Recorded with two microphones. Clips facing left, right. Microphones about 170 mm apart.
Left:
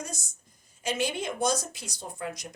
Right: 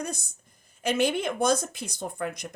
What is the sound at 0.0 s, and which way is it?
Speech, 60° right (ahead or behind).